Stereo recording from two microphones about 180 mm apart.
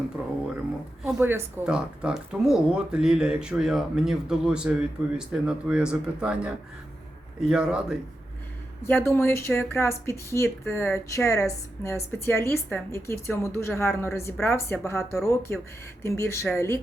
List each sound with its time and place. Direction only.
1.0 s speech: 10° right (ahead or behind)
8.8 s a woman's voice: 15° left (ahead or behind)